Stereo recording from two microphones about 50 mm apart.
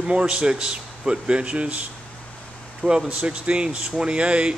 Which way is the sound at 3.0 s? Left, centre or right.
Right.